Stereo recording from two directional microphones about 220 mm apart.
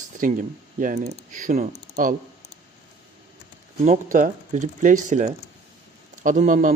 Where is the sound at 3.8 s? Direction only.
35° right (ahead or behind).